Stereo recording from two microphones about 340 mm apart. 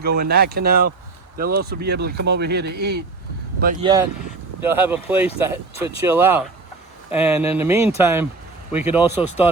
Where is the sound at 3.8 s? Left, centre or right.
Centre.